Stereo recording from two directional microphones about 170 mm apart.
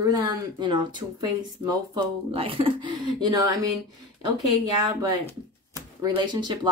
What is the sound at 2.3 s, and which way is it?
Speech, 35° right (ahead or behind).